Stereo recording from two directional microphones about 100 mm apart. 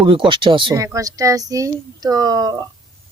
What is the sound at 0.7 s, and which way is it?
Speech, 35° right (ahead or behind).